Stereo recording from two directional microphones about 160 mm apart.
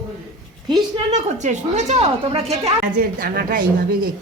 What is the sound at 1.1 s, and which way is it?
A woman's voice, 45° right (ahead or behind).